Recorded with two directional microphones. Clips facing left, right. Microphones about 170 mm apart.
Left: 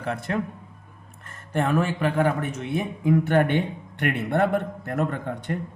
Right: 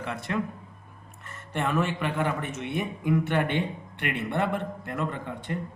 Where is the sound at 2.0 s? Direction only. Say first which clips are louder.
Left 5 dB; 45° left (ahead or behind).